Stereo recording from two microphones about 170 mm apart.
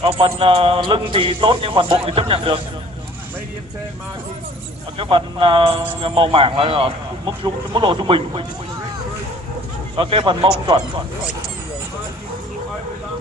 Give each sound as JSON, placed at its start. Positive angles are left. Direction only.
{"t": 0.0, "sound": "a man's voice", "side_deg": -35}
{"t": 4.9, "sound": "a man's voice", "side_deg": -30}
{"t": 9.9, "sound": "a man's voice", "side_deg": -30}